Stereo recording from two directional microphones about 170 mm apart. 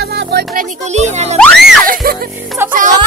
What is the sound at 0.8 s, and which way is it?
Speech, 40° right (ahead or behind).